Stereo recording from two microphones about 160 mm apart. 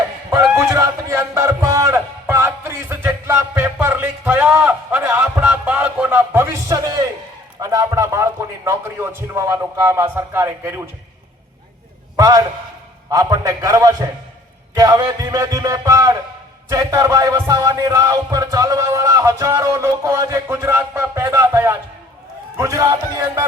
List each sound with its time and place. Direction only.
0.3 s a sound: 15° right (ahead or behind)
7.6 s a man's voice: 20° right (ahead or behind)
12.1 s a man's voice: 20° right (ahead or behind)
13.1 s music: 20° right (ahead or behind)